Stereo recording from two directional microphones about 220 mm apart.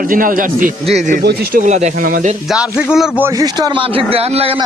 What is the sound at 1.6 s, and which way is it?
Speech, 35° right (ahead or behind).